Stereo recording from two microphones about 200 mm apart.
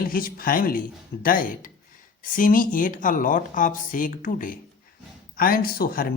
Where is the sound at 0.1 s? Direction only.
45° left (ahead or behind).